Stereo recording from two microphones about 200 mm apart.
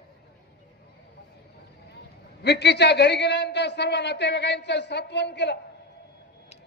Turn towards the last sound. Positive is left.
turn(degrees=60)  # may be behind; listen again after turning